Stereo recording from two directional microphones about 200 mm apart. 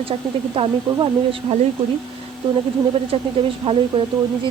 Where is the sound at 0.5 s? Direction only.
25° right (ahead or behind).